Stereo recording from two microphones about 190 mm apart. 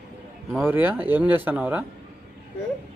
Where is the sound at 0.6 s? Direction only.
10° right (ahead or behind).